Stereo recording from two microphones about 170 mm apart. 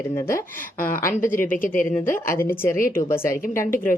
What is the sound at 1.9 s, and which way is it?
Speech, 15° left (ahead or behind).